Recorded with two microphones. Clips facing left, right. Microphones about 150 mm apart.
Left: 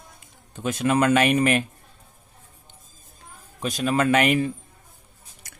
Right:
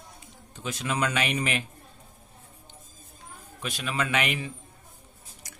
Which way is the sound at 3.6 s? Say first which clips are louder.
Left 8 dB; 40° left (ahead or behind).